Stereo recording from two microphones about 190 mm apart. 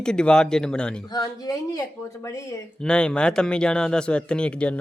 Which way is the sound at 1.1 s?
20° left (ahead or behind).